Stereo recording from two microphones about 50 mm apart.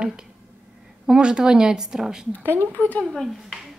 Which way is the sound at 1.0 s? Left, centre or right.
Centre.